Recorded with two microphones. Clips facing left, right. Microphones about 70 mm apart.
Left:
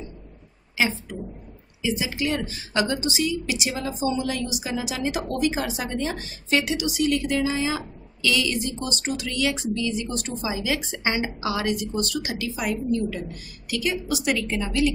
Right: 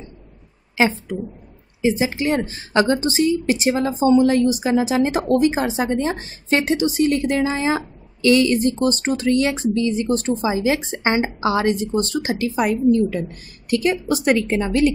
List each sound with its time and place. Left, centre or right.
1.8 s a woman's voice: right